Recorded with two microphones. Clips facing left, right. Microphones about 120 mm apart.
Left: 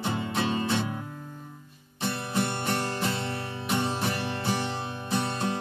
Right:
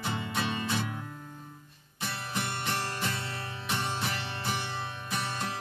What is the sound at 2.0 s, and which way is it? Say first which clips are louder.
Music: left 7 dB; 25° left (ahead or behind).